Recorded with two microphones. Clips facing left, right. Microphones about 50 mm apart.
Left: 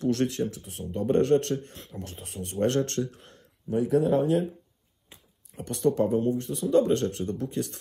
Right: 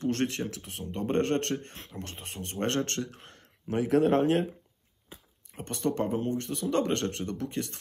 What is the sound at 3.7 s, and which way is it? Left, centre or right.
Speech, right.